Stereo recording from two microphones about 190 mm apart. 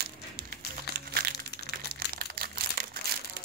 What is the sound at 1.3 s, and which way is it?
Crumpling, 60° left (ahead or behind).